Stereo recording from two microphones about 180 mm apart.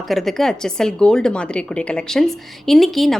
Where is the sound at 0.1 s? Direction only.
Centre (ahead or behind).